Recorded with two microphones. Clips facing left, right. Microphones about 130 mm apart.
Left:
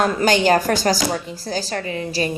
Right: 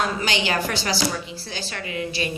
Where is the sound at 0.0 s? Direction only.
45° left (ahead or behind).